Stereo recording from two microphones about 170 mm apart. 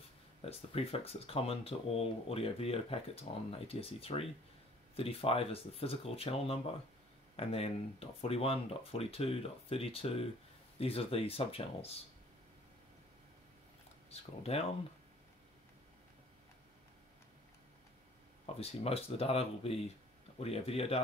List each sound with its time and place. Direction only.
0.5 s speech: 35° left (ahead or behind)
14.4 s speech: 35° left (ahead or behind)
18.6 s speech: 35° left (ahead or behind)